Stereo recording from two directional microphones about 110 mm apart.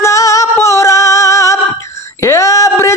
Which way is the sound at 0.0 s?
30° left (ahead or behind).